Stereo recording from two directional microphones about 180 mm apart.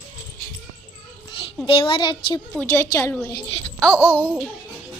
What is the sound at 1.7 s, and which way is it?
Speech, 30° left (ahead or behind).